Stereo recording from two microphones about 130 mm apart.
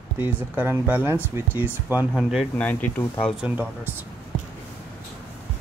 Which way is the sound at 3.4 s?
10° right (ahead or behind).